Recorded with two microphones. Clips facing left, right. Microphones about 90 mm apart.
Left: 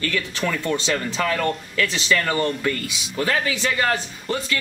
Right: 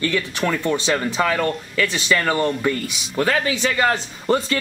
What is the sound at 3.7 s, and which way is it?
Speech, 25° right (ahead or behind).